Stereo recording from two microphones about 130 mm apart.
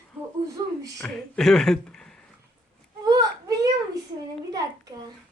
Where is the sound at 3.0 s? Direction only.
30° right (ahead or behind).